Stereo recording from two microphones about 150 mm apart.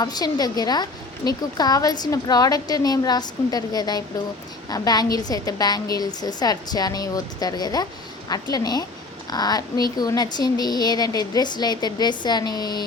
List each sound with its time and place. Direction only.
0.0 s a woman's voice: 25° left (ahead or behind)